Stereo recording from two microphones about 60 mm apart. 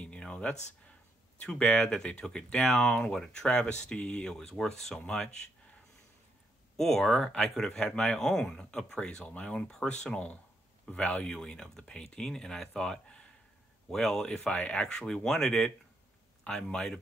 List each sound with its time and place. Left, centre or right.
0.0 s a sound: left
1.4 s speech: centre
6.8 s speech: centre